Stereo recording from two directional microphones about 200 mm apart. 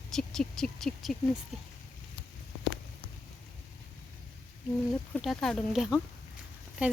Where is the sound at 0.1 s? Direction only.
Centre (ahead or behind).